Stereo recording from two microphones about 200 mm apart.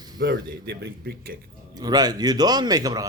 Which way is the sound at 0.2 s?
50° right (ahead or behind).